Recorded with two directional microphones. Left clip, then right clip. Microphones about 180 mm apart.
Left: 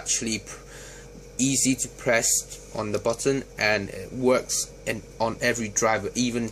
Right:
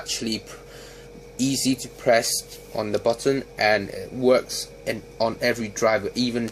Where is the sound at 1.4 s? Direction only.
20° right (ahead or behind).